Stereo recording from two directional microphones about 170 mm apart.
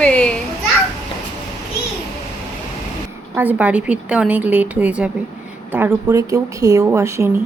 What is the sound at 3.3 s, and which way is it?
A woman's voice, 10° right (ahead or behind).